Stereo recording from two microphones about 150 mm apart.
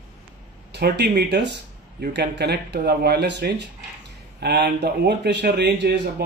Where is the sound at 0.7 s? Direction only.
90° right.